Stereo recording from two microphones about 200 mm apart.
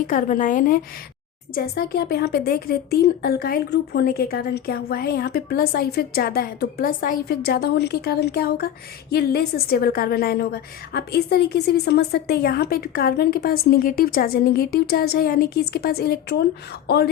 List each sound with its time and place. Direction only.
0.1 s a woman's voice: 40° left (ahead or behind)